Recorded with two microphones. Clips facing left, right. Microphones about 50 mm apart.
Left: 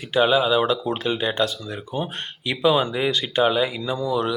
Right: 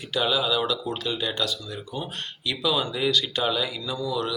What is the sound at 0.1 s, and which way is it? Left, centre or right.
Speech, left.